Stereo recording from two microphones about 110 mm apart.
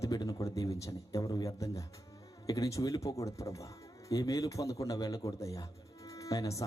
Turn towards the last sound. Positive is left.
turn(degrees=30)  # may be behind; listen again after turning